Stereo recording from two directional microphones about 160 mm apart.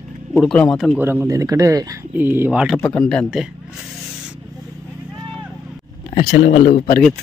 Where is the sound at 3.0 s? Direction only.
Centre (ahead or behind).